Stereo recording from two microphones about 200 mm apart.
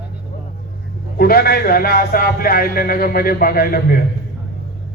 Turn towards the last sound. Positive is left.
turn(degrees=50)  # may be behind; listen again after turning